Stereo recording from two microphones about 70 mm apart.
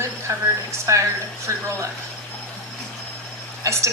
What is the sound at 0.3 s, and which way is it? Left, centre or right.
Speech, right.